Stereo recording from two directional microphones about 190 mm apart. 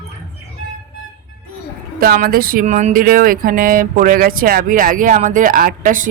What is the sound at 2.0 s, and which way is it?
Speech, 50° right (ahead or behind).